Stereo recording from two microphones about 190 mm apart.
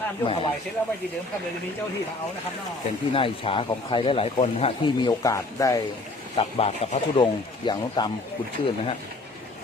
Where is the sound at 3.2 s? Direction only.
30° left (ahead or behind).